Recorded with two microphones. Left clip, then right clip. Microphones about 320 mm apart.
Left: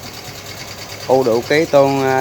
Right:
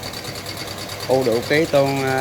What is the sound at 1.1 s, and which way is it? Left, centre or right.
Speech, centre.